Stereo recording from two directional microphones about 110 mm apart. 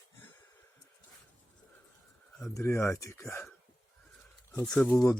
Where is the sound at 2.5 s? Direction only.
25° left (ahead or behind).